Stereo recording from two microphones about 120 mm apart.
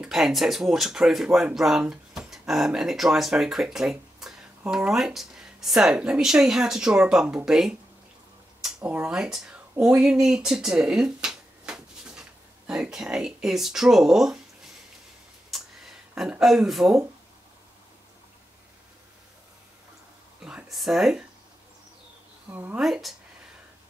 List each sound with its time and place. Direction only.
0.0 s speech: 5° right (ahead or behind)
8.8 s speech: 15° right (ahead or behind)
9.1 s speech: 5° right (ahead or behind)
15.5 s a sound: 5° right (ahead or behind)
20.4 s speech: 5° right (ahead or behind)
22.5 s speech: 15° right (ahead or behind)
22.8 s speech: 5° right (ahead or behind)